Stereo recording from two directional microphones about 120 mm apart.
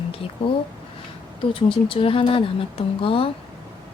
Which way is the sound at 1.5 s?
45° left (ahead or behind).